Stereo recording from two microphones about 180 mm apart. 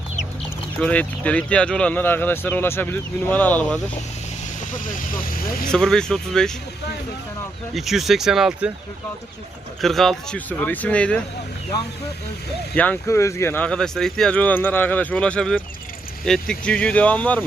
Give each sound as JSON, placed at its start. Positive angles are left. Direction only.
{"t": 0.8, "sound": "speech", "side_deg": 5}
{"t": 4.7, "sound": "speech", "side_deg": 50}
{"t": 5.7, "sound": "speech", "side_deg": 5}
{"t": 7.7, "sound": "speech", "side_deg": 0}
{"t": 9.8, "sound": "speech", "side_deg": 0}
{"t": 12.7, "sound": "speech", "side_deg": 10}